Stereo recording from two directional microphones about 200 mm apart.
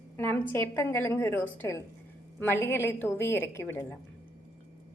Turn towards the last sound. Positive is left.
turn(degrees=10)  # may be behind; listen again after turning